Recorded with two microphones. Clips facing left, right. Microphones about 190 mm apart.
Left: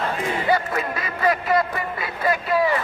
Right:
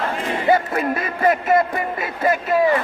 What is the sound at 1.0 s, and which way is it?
Speech, 50° right (ahead or behind).